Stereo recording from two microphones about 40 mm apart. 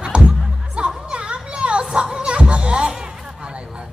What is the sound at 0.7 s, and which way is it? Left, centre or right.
Music, centre.